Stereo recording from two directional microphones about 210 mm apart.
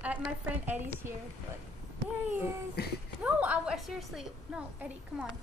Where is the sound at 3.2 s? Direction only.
5° right (ahead or behind).